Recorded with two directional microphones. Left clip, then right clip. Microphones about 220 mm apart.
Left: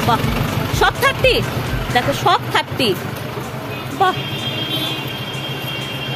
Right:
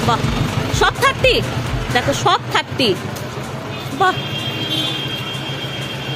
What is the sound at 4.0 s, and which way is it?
Speech, centre (ahead or behind).